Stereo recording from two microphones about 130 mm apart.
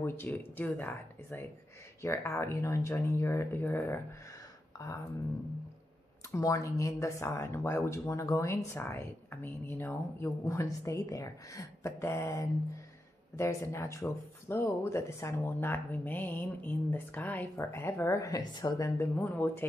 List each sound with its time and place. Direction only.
0.0 s speech: 15° left (ahead or behind)
6.3 s speech: 25° left (ahead or behind)
18.9 s speech: 15° left (ahead or behind)